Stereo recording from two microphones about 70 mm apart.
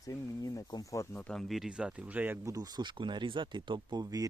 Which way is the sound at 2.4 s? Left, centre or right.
Right.